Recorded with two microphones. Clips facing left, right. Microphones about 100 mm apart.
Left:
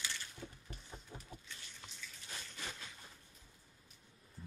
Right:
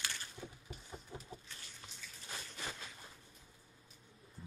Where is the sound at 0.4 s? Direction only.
15° right (ahead or behind).